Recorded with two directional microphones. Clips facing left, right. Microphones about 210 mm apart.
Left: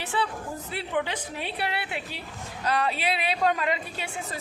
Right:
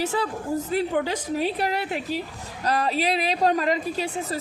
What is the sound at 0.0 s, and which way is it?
A man's voice, 40° right (ahead or behind).